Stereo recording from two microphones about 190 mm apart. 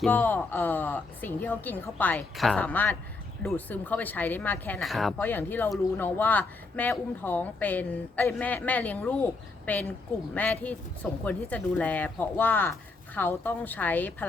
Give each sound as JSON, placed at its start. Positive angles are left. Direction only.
{"t": 0.0, "sound": "a woman's voice", "side_deg": 10}